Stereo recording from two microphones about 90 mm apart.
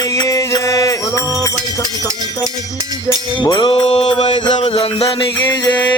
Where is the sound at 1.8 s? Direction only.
40° right (ahead or behind).